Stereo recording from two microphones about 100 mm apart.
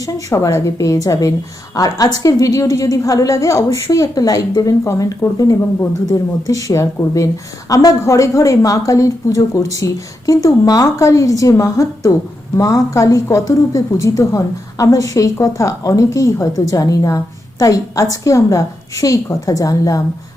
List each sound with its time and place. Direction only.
0.0 s a woman's voice: 35° left (ahead or behind)